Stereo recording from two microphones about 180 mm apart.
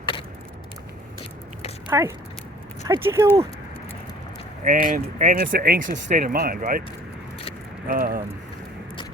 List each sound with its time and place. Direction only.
1.9 s speech: 15° right (ahead or behind)
4.6 s speech: 45° right (ahead or behind)
7.9 s speech: 50° right (ahead or behind)